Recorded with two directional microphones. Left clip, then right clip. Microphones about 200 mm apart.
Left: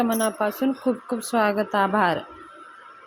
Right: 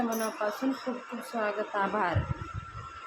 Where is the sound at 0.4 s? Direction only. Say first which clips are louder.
Left 7 dB; 40° left (ahead or behind).